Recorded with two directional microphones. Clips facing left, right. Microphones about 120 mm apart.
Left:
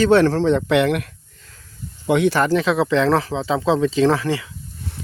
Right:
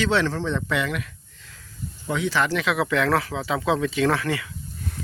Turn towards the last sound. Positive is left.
turn(degrees=30)  # may be behind; listen again after turning